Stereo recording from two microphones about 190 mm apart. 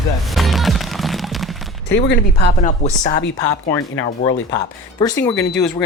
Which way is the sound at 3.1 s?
60° left (ahead or behind).